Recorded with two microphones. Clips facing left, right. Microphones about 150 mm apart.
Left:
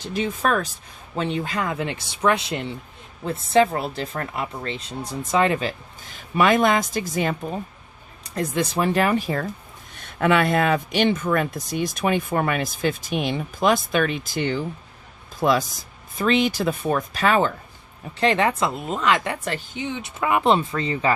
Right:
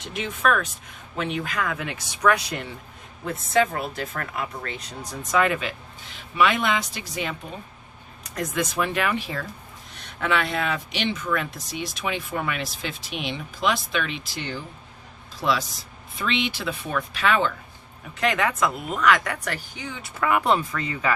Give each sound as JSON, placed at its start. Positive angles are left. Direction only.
{"t": 0.0, "sound": "speech", "side_deg": 35}
{"t": 8.2, "sound": "speech", "side_deg": 30}
{"t": 18.2, "sound": "speech", "side_deg": 30}